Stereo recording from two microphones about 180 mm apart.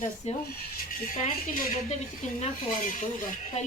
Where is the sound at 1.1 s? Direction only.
50° left (ahead or behind).